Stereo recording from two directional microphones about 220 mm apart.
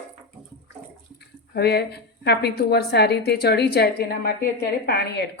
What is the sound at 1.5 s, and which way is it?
A woman's voice, 45° left (ahead or behind).